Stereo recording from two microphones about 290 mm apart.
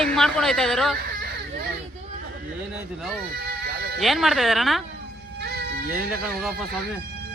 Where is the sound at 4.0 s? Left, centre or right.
Centre.